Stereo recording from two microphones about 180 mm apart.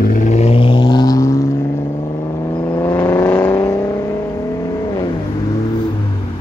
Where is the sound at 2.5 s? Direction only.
20° left (ahead or behind).